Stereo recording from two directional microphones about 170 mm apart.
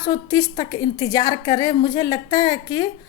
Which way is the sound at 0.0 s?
20° left (ahead or behind).